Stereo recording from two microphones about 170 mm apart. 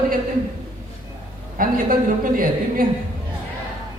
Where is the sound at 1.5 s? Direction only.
55° right (ahead or behind).